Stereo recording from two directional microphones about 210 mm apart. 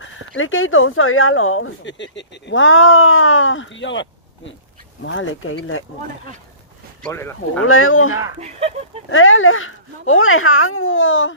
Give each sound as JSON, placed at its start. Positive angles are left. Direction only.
{"t": 0.3, "sound": "speech", "side_deg": 70}
{"t": 7.0, "sound": "speech", "side_deg": 10}
{"t": 7.6, "sound": "speech", "side_deg": 80}
{"t": 8.4, "sound": "speech", "side_deg": -30}
{"t": 9.1, "sound": "speech", "side_deg": 70}